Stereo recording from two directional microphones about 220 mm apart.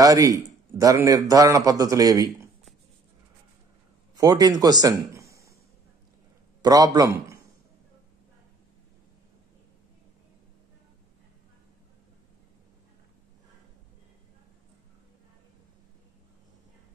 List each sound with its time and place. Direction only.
0.0 s a man's voice: 15° right (ahead or behind)
4.1 s a man's voice: 15° right (ahead or behind)
6.6 s a man's voice: 15° right (ahead or behind)